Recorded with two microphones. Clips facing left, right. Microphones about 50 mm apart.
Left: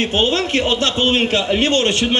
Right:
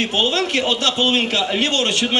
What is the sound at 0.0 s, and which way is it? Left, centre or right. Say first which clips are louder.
A man's voice: left 2 dB; left.